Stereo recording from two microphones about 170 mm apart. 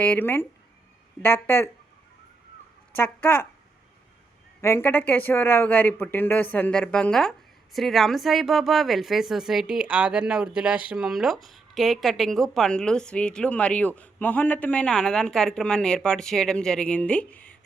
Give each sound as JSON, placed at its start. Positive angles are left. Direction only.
{"t": 0.0, "sound": "speech", "side_deg": 10}
{"t": 2.9, "sound": "speech", "side_deg": 10}
{"t": 4.6, "sound": "speech", "side_deg": 15}